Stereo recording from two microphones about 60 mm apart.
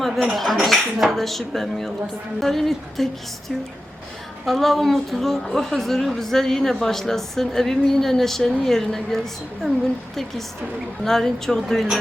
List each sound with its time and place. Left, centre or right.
0.0 s a woman's voice: centre
4.4 s a woman's voice: centre
11.0 s speech: centre